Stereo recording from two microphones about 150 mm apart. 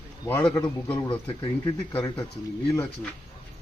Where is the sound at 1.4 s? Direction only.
30° left (ahead or behind).